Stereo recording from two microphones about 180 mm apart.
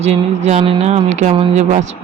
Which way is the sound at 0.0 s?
35° right (ahead or behind).